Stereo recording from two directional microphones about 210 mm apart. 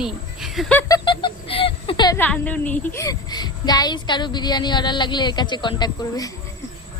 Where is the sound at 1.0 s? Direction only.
25° left (ahead or behind).